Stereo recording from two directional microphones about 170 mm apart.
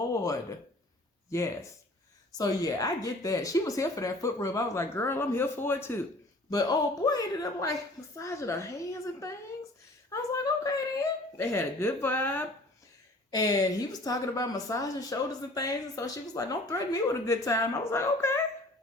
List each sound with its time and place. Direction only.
1.3 s a woman's voice: 15° left (ahead or behind)